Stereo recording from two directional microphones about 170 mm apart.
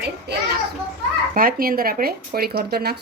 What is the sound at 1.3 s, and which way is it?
Speech, 60° right (ahead or behind).